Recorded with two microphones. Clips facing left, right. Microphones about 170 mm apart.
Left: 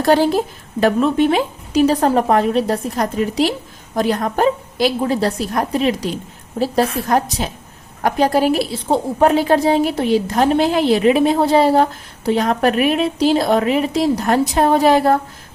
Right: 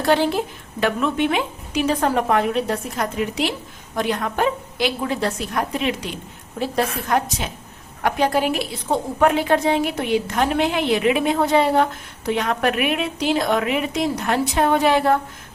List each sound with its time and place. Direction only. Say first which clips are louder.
0.0 s a woman's voice: left 4 dB; 40° left (ahead or behind)